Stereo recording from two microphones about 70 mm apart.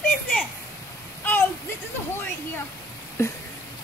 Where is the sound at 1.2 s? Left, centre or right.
Left.